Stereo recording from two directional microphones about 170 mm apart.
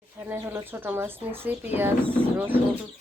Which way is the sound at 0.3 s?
10° right (ahead or behind).